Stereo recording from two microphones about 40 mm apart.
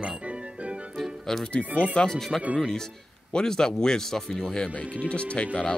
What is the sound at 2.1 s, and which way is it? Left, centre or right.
Speech, centre.